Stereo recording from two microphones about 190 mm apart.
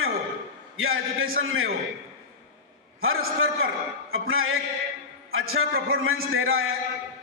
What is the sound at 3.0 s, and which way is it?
A man's voice, 90° right.